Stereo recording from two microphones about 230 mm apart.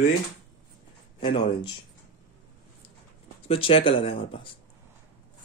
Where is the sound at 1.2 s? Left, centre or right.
Left.